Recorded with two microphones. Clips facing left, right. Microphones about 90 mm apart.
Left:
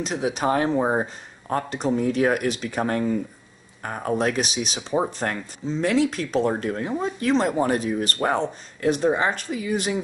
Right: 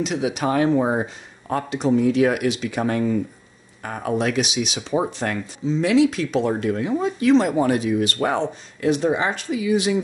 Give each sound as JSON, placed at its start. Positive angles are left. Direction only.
{"t": 0.0, "sound": "speech", "side_deg": 40}